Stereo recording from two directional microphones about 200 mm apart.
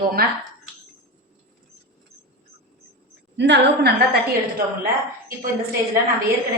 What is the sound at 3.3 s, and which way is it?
Speech, 60° right (ahead or behind).